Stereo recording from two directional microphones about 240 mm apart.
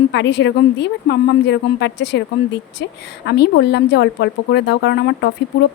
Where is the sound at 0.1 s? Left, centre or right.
Left.